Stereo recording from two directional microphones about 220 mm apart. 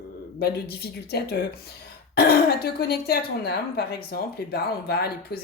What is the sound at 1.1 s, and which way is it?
Speech, 45° left (ahead or behind).